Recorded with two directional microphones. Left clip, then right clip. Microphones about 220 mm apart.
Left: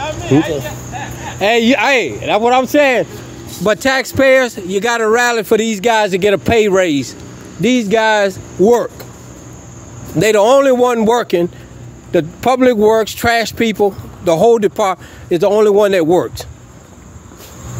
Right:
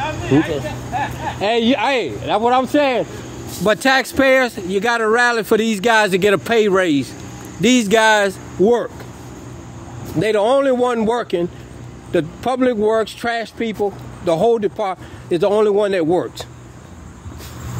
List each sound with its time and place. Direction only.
0.0 s a sound: 55° left (ahead or behind)
1.4 s speech: 25° left (ahead or behind)
3.6 s speech: 5° left (ahead or behind)
10.1 s speech: 30° left (ahead or behind)
14.2 s speech: 20° left (ahead or behind)